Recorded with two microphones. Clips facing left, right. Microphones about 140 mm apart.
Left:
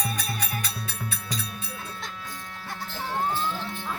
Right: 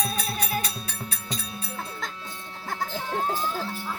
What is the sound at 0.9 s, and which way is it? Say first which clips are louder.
Music: left 1 dB; 40° right (ahead or behind).